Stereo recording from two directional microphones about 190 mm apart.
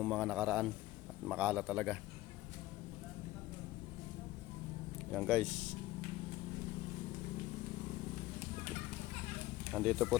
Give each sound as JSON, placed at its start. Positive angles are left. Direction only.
{"t": 0.0, "sound": "speech", "side_deg": 0}
{"t": 5.1, "sound": "speech", "side_deg": 0}
{"t": 9.7, "sound": "speech", "side_deg": 0}